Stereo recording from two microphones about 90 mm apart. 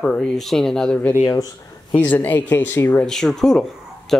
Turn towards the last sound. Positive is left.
turn(degrees=5)  # may be behind; listen again after turning